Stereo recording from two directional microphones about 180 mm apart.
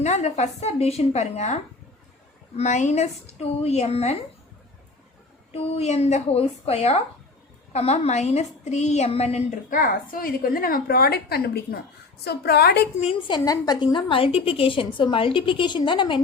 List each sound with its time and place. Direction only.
0.0 s a woman's voice: 40° left (ahead or behind)
2.6 s a woman's voice: 40° left (ahead or behind)
5.5 s a woman's voice: 35° left (ahead or behind)
9.7 s a woman's voice: 50° left (ahead or behind)
13.0 s a woman's voice: 30° left (ahead or behind)